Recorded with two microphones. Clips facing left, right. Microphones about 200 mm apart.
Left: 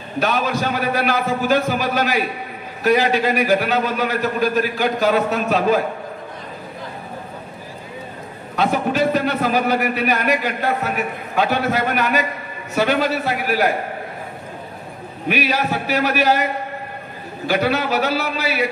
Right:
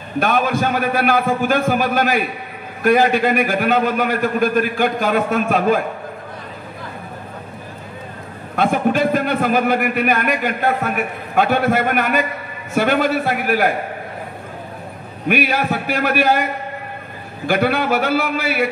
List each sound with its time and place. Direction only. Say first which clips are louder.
0.2 s a man's voice: right 2 dB; 50° right (ahead or behind)
8.5 s a man's voice: right 2 dB; 50° right (ahead or behind)
15.2 s a man's voice: right 2 dB; 50° right (ahead or behind)
17.5 s a man's voice: right 2 dB; 55° right (ahead or behind)